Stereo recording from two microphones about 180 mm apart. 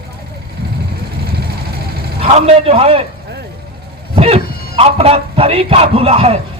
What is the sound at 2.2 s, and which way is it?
Speech, 35° right (ahead or behind).